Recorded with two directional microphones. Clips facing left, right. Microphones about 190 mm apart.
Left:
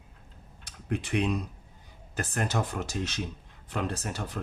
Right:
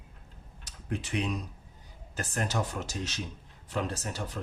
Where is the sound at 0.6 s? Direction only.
55° left (ahead or behind).